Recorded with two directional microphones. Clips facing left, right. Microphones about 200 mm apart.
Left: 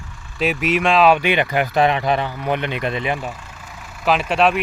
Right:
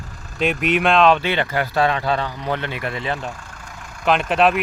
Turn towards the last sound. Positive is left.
turn(degrees=0)  # may be behind; listen again after turning